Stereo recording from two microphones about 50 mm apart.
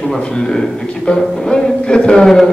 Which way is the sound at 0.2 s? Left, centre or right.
Centre.